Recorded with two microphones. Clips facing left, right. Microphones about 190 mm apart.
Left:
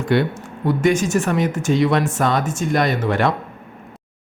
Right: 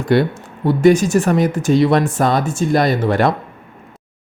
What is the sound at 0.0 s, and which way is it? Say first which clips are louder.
Speech: right 3 dB; 35° right (ahead or behind).